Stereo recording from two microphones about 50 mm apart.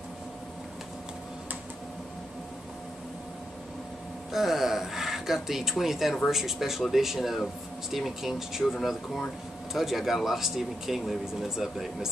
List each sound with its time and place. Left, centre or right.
4.3 s speech: centre